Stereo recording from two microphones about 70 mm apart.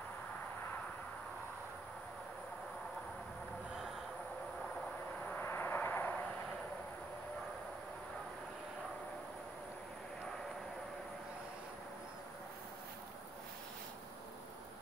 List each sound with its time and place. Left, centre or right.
5.3 s vehicle: left